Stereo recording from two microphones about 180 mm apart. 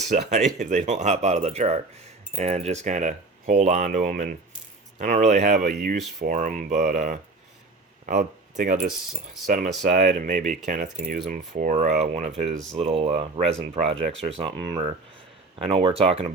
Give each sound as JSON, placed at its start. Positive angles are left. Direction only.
{"t": 0.1, "sound": "speech", "side_deg": -40}
{"t": 12.7, "sound": "speech", "side_deg": -30}